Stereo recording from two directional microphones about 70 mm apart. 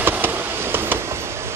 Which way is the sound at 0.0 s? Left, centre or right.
Right.